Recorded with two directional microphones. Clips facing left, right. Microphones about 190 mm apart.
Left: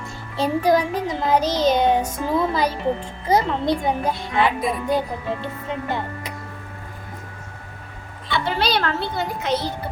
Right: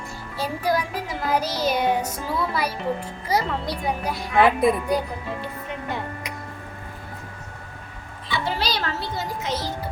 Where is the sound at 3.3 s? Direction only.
25° left (ahead or behind).